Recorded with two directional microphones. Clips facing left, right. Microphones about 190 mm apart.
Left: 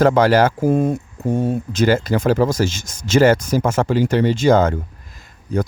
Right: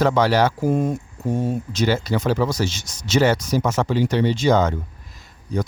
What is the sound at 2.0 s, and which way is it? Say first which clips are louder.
Speech: left 4 dB; 45° left (ahead or behind).